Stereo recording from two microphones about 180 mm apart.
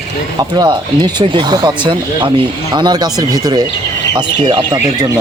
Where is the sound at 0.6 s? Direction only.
25° right (ahead or behind).